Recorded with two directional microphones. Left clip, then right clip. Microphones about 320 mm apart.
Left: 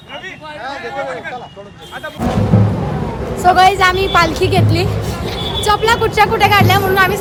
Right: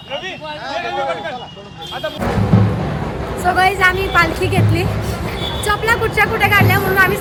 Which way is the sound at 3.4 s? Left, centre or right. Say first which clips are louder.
Left 4 dB; centre.